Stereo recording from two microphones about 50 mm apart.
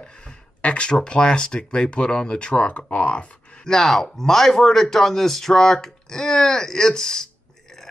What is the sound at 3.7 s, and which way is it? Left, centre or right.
A man's voice, centre.